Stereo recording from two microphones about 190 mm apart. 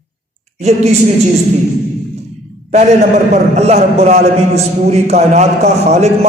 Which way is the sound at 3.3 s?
35° right (ahead or behind).